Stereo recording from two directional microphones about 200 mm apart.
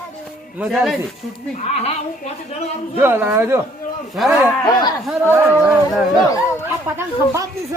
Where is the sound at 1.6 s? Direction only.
35° left (ahead or behind).